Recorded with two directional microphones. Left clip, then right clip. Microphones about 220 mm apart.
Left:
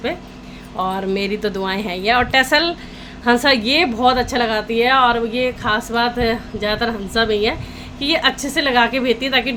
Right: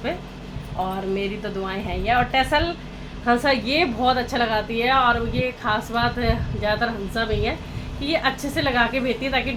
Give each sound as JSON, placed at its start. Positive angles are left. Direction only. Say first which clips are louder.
{"t": 1.1, "sound": "a woman's voice", "louder": "left 6 dB", "side_deg": 50}